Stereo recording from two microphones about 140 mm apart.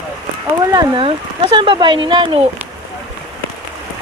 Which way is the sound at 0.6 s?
30° right (ahead or behind).